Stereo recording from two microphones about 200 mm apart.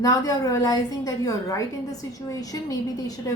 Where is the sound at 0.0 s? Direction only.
15° left (ahead or behind).